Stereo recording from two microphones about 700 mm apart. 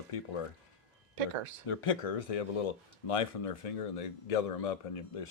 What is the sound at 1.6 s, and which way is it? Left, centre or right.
Speech, left.